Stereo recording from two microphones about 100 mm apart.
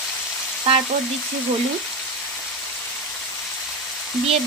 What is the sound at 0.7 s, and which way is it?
Frying, 90° right.